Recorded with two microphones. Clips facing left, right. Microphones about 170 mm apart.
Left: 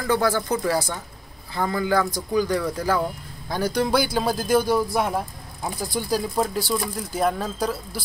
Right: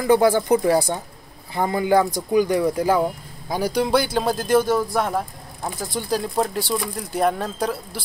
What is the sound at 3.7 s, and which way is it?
Speech, centre (ahead or behind).